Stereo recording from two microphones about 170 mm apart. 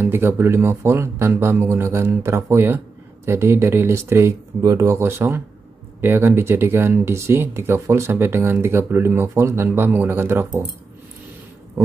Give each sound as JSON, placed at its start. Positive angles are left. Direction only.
{"t": 0.0, "sound": "speech", "side_deg": -15}